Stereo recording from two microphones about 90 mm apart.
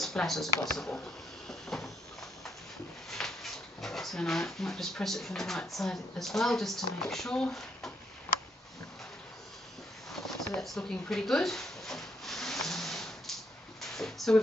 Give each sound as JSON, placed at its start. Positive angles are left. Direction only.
{"t": 0.0, "sound": "speech", "side_deg": 5}
{"t": 1.5, "sound": "cupboard open or close", "side_deg": 5}
{"t": 3.1, "sound": "speech", "side_deg": 5}
{"t": 10.2, "sound": "a sound", "side_deg": 5}